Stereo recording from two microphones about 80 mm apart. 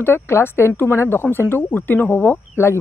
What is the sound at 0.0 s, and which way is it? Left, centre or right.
Speech, left.